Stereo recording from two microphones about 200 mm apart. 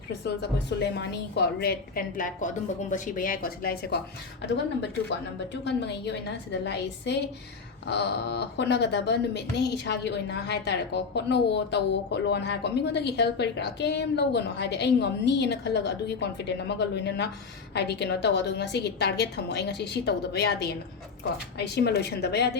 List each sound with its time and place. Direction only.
0.8 s a woman's voice: 60° left (ahead or behind)